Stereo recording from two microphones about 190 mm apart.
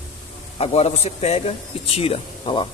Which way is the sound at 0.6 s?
35° left (ahead or behind).